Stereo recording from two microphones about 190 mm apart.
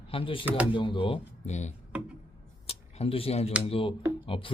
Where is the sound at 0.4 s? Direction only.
10° right (ahead or behind).